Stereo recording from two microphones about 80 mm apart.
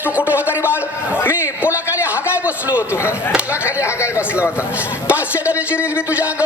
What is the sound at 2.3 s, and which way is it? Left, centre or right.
Speech, centre.